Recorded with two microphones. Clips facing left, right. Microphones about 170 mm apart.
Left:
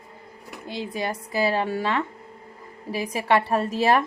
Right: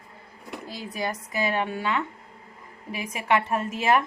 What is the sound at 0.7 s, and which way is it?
Speech, 25° left (ahead or behind).